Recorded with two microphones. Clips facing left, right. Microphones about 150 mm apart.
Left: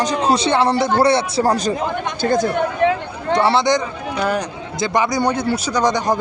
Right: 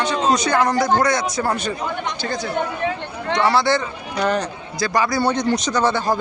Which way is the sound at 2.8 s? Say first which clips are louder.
Left 10 dB; 60° left (ahead or behind).